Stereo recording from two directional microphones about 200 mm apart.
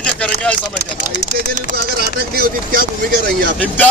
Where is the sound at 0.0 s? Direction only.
5° left (ahead or behind).